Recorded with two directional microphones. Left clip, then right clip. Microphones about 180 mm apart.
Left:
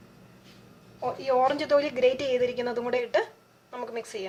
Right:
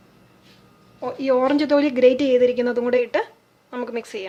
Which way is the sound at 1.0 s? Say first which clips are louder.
Right 4 dB; 45° right (ahead or behind).